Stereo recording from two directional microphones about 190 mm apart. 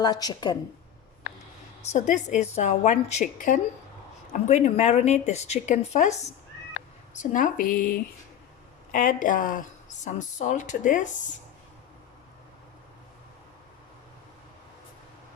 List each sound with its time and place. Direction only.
0.0 s a woman's voice: 20° left (ahead or behind)
1.9 s speech: 40° left (ahead or behind)